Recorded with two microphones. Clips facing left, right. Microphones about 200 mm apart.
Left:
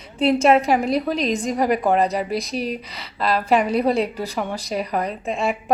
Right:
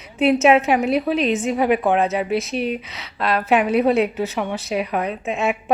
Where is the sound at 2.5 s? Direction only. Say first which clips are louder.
Right 2 dB; 35° left (ahead or behind).